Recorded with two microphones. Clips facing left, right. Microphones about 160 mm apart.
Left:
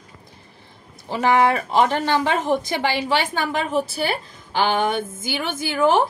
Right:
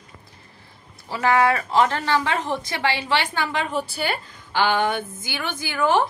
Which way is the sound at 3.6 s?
5° left (ahead or behind).